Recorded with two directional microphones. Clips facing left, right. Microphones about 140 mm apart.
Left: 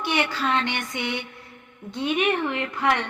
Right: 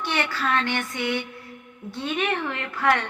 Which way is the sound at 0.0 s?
15° left (ahead or behind).